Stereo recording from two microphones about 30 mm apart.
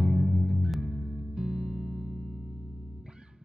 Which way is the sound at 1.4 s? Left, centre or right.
Right.